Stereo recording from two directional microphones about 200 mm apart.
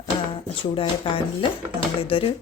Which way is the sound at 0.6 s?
25° left (ahead or behind).